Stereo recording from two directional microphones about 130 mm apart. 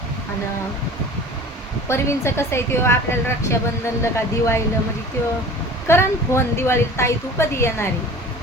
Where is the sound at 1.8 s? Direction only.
20° left (ahead or behind).